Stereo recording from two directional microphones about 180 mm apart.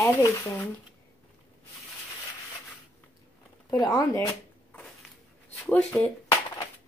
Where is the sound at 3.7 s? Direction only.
20° left (ahead or behind).